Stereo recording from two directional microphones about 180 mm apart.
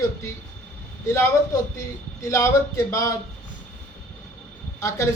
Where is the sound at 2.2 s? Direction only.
15° left (ahead or behind).